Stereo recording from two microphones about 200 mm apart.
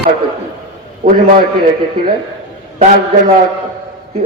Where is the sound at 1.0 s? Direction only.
45° right (ahead or behind).